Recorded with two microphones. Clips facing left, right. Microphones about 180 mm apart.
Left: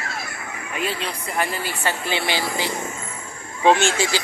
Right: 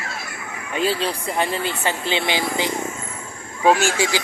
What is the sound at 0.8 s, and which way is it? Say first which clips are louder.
Speech: right 6 dB; 30° right (ahead or behind).